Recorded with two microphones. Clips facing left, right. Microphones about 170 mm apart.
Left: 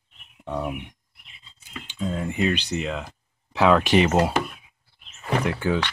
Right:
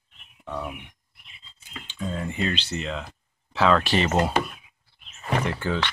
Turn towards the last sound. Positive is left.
turn(degrees=10)  # may be behind; listen again after turning